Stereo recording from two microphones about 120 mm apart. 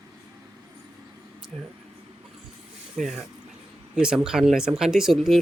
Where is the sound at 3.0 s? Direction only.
Centre (ahead or behind).